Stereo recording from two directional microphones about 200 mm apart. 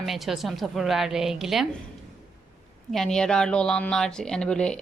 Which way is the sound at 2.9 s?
Centre (ahead or behind).